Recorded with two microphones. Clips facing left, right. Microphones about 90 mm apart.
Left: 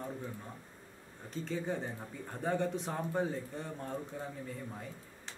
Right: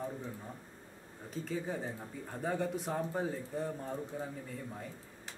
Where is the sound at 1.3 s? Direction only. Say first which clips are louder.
Left 1 dB; centre (ahead or behind).